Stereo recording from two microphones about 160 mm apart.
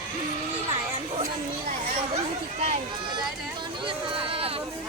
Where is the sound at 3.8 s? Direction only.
35° right (ahead or behind).